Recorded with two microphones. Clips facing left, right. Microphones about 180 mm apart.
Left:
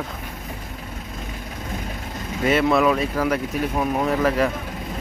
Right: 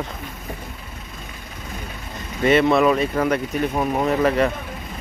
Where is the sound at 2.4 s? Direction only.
5° left (ahead or behind).